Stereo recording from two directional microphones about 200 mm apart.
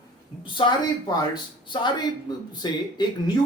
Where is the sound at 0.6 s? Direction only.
25° left (ahead or behind).